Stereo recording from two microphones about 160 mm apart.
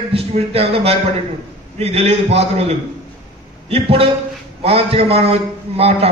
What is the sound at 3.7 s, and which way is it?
A man's voice, 35° right (ahead or behind).